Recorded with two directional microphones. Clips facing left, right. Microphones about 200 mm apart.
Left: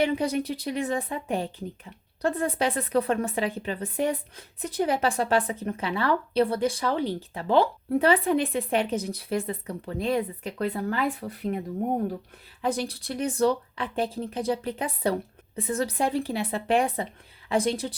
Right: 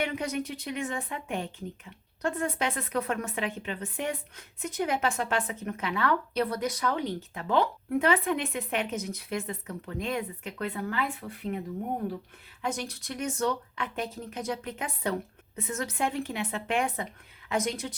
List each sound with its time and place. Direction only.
0.0 s speech: 35° left (ahead or behind)
12.6 s speech: 35° left (ahead or behind)